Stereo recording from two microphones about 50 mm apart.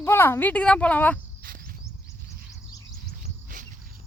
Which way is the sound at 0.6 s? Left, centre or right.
Left.